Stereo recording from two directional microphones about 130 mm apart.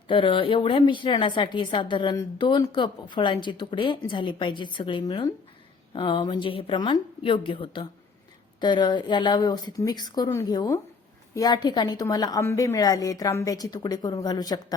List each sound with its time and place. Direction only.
0.1 s a woman's voice: 40° left (ahead or behind)